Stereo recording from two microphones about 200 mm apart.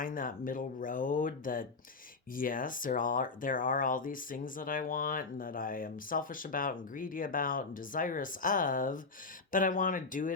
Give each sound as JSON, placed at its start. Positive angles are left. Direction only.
{"t": 0.0, "sound": "speech", "side_deg": 45}